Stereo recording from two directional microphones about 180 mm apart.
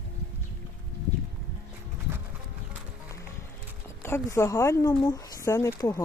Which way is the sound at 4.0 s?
15° left (ahead or behind).